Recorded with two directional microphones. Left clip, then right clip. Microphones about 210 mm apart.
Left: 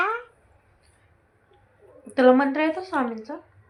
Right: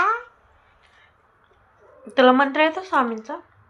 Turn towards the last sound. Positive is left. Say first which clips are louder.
# right 4 dB
turn(degrees=-45)  # may be behind; listen again after turning